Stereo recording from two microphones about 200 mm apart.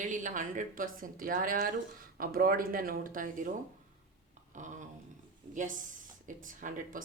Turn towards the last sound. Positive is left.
turn(degrees=-40)  # may be behind; listen again after turning